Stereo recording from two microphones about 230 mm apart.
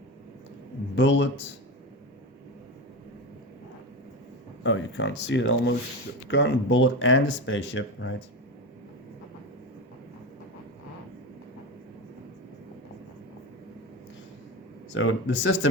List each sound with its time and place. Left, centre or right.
0.9 s speech: left
4.6 s speech: left
14.9 s speech: left